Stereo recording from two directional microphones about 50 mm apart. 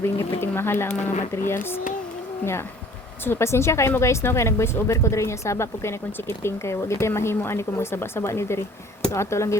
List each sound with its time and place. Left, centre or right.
0.0 s speech: left
7.1 s speech: left
9.1 s speech: left